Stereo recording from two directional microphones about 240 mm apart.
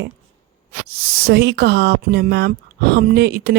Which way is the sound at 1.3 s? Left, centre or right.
Right.